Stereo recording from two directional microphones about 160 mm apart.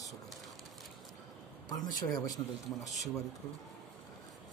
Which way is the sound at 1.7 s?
25° left (ahead or behind).